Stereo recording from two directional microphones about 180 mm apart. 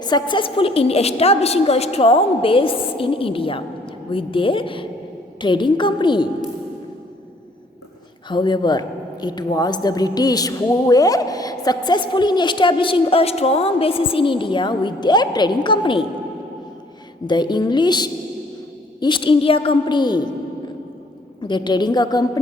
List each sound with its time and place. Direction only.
0.0 s a woman's voice: 25° left (ahead or behind)
8.3 s a woman's voice: 25° left (ahead or behind)
17.2 s a woman's voice: 25° left (ahead or behind)
21.4 s a woman's voice: 25° left (ahead or behind)